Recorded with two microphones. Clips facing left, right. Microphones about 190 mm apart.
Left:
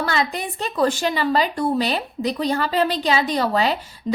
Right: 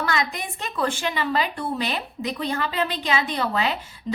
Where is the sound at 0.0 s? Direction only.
30° left (ahead or behind).